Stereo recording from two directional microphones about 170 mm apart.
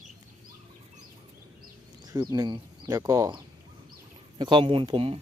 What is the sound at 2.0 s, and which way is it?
Speech, 20° right (ahead or behind).